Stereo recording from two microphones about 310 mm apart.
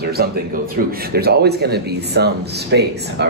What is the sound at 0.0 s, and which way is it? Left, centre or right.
Speech, right.